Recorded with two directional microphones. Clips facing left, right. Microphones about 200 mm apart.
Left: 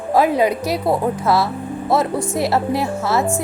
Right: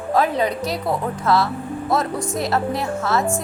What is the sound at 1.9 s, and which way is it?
Speech, 25° left (ahead or behind).